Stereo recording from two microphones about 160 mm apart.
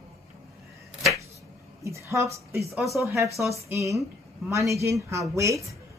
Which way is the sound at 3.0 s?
20° right (ahead or behind).